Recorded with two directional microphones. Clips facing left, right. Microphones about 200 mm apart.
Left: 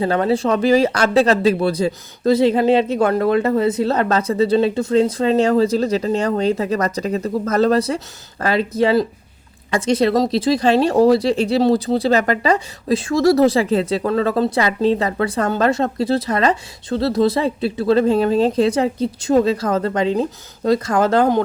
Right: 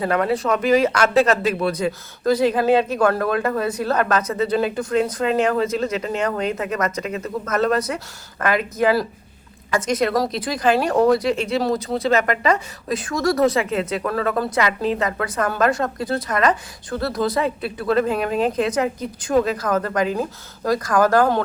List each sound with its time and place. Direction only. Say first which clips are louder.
0.0 s speech: left 3 dB; 30° left (ahead or behind)